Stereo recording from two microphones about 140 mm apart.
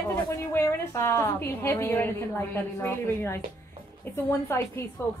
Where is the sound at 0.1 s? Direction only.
20° left (ahead or behind).